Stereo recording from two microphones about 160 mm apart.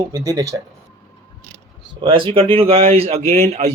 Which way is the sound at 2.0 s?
35° right (ahead or behind).